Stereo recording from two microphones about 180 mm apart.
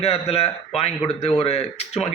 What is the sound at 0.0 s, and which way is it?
A man's voice, 35° left (ahead or behind).